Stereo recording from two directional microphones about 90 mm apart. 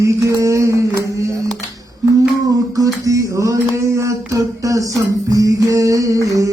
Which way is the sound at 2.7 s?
40° right (ahead or behind).